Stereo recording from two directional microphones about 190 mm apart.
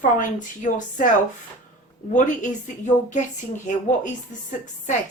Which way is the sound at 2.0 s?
40° left (ahead or behind).